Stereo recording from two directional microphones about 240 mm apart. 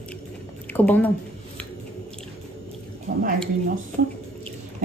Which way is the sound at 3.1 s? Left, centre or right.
Right.